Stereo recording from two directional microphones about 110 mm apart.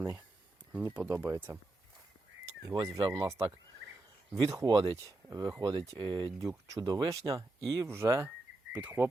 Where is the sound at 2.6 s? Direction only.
30° right (ahead or behind).